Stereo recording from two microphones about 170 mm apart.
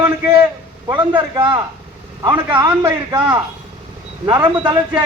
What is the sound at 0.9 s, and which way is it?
A man's voice, 25° right (ahead or behind).